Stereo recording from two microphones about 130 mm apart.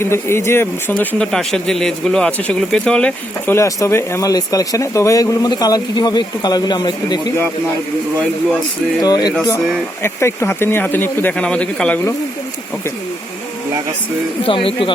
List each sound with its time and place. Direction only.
0.0 s speech: 20° left (ahead or behind)
1.2 s speech: 5° left (ahead or behind)
3.5 s speech: 20° left (ahead or behind)
9.0 s speech: 30° left (ahead or behind)
10.0 s speech: 20° left (ahead or behind)
14.4 s speech: 45° left (ahead or behind)